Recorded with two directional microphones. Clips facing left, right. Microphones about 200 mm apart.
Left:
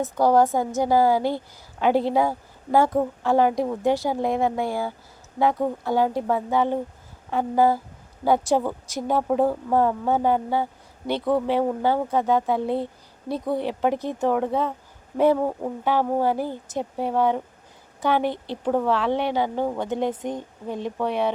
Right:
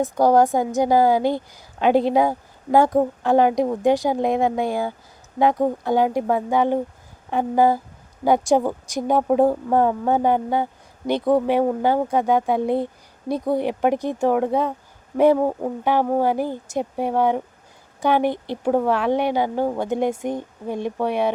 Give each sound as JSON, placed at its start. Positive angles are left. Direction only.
{"t": 0.0, "sound": "speech", "side_deg": -15}